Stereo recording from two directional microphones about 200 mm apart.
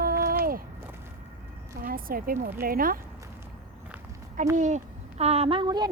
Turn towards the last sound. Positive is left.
turn(degrees=-20)  # may be behind; listen again after turning